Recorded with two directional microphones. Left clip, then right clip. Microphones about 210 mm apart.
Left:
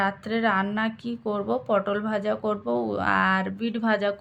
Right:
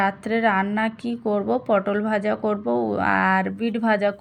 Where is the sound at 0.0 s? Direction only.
15° right (ahead or behind).